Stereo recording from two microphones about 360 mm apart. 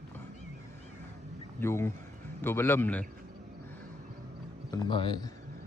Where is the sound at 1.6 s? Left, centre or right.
Centre.